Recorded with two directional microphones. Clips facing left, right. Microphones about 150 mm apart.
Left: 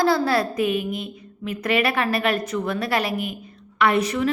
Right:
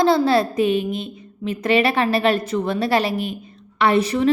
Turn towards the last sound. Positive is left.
turn(degrees=-30)  # may be behind; listen again after turning